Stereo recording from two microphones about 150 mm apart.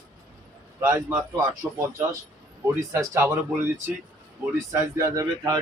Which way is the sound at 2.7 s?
20° right (ahead or behind).